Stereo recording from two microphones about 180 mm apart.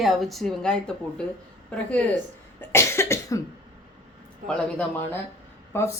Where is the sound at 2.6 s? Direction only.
15° left (ahead or behind).